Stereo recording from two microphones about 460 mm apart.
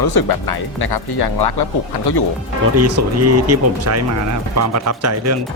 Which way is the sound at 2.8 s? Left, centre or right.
Right.